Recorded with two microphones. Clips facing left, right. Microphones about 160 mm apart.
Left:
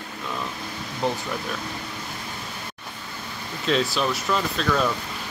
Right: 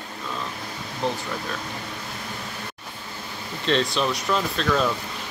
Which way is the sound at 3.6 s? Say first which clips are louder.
Even; 5° left (ahead or behind).